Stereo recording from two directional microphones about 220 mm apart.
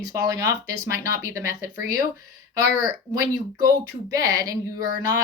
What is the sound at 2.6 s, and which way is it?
Speech, 15° right (ahead or behind).